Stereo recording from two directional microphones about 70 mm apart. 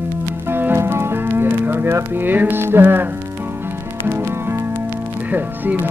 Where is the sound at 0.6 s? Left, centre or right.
Right.